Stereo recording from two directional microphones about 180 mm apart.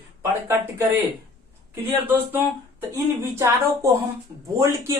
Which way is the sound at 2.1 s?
10° right (ahead or behind).